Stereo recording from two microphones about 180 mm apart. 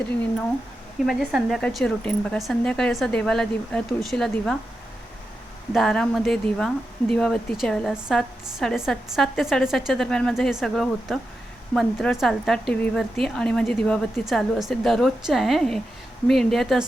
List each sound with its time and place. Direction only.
1.0 s a woman's voice: centre (ahead or behind)
5.7 s a woman's voice: centre (ahead or behind)